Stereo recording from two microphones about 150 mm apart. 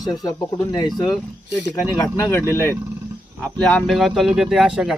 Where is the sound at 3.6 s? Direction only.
5° left (ahead or behind).